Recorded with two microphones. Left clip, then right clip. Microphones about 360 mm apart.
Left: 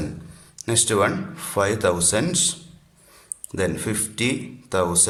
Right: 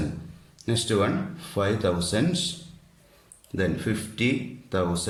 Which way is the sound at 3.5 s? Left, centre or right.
Centre.